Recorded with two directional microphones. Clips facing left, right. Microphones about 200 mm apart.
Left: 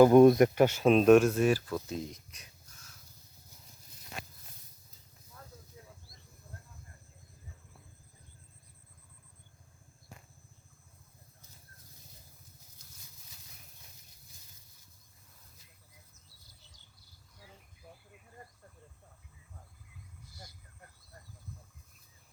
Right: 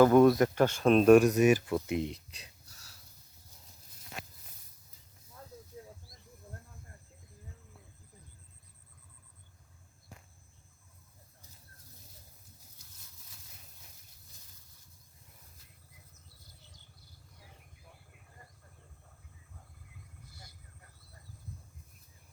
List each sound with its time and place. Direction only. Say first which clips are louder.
0.0 s speech: left 2 dB; 15° left (ahead or behind); by 1.1 s centre (ahead or behind)
1.1 s speech: right 1 dB; 15° right (ahead or behind)
2.6 s a sound: left 1 dB; 35° right (ahead or behind)